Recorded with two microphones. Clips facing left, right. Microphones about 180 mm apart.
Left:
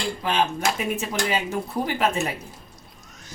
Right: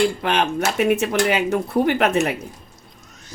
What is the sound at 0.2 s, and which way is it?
Speech, 70° right (ahead or behind).